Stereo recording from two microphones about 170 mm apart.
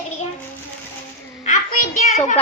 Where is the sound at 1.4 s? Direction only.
45° left (ahead or behind).